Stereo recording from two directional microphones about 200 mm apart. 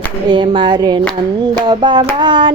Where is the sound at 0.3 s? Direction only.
25° right (ahead or behind).